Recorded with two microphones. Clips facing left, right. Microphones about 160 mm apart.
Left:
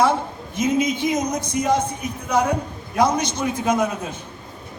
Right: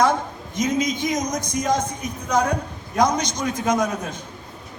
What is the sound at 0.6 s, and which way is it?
Speech, 10° left (ahead or behind).